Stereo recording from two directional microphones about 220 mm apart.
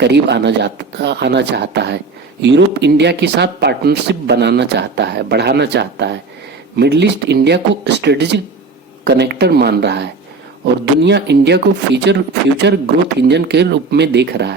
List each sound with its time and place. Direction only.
0.0 s speech: 50° right (ahead or behind)